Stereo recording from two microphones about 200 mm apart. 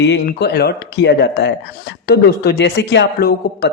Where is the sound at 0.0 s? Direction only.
60° left (ahead or behind).